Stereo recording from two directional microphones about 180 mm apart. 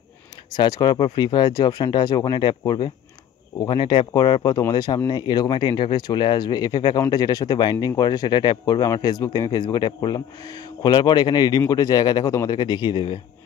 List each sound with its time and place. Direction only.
0.5 s speech: 25° left (ahead or behind)